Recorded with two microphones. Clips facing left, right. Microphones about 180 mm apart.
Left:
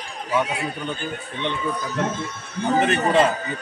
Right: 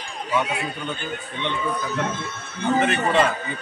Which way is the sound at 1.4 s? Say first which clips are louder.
Even; 40° left (ahead or behind).